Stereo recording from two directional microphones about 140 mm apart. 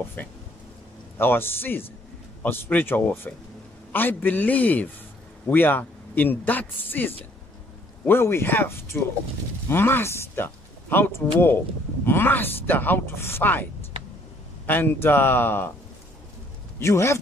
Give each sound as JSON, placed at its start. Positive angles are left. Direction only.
{"t": 0.2, "sound": "speech", "side_deg": 10}
{"t": 14.7, "sound": "speech", "side_deg": 15}
{"t": 16.8, "sound": "speech", "side_deg": 20}